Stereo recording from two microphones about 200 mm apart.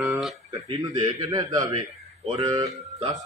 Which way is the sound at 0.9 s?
35° right (ahead or behind).